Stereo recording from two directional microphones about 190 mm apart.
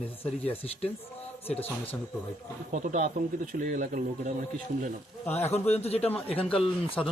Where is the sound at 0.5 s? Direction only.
30° left (ahead or behind).